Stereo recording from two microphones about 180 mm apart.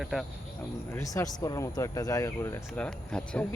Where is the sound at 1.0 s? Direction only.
20° left (ahead or behind).